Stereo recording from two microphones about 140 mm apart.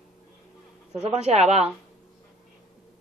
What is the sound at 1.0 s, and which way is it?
Speech, 50° right (ahead or behind).